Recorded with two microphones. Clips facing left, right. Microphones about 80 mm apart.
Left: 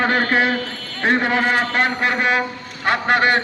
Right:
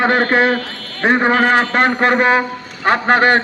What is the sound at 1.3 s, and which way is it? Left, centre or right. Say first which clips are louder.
A man's voice: right 5 dB; right.